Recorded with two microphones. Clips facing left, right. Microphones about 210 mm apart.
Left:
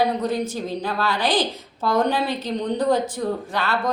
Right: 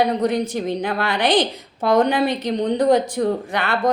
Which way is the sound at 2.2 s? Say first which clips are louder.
Right 5 dB; 15° right (ahead or behind).